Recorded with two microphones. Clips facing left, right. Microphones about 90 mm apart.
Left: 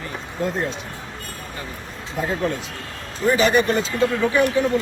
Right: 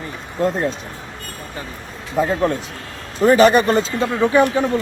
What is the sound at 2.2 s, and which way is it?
A man's voice, 40° right (ahead or behind).